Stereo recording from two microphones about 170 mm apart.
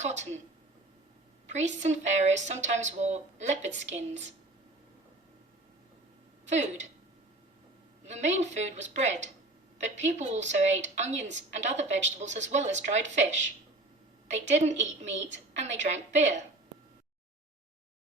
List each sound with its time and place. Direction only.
0.0 s a woman's voice: 45° right (ahead or behind)
1.5 s a woman's voice: 45° right (ahead or behind)
6.5 s a woman's voice: 45° right (ahead or behind)
8.0 s a woman's voice: 40° right (ahead or behind)